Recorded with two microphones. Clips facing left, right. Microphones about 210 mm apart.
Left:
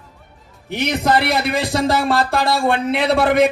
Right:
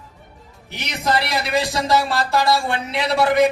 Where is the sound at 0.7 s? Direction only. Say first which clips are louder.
Left 5 dB; 55° left (ahead or behind).